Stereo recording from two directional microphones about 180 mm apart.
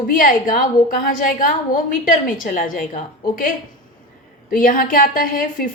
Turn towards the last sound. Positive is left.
turn(degrees=50)  # may be behind; listen again after turning